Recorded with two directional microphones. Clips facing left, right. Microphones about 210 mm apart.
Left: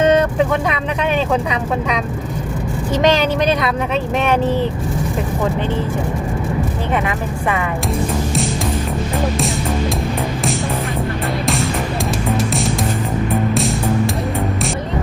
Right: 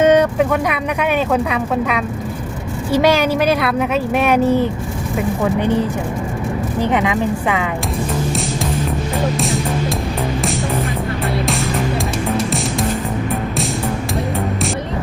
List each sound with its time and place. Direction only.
0.0 s vehicle: 10° right (ahead or behind)
1.3 s speech: 5° right (ahead or behind)
6.9 s speech: 15° right (ahead or behind)